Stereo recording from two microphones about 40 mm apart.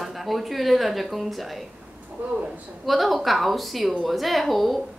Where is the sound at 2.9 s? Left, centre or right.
Centre.